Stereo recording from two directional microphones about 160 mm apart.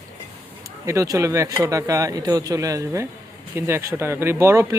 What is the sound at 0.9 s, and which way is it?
Speech, 20° right (ahead or behind).